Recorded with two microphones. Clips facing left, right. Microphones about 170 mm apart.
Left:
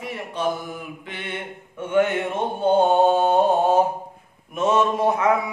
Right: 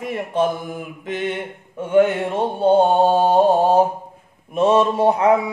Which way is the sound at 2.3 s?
35° right (ahead or behind).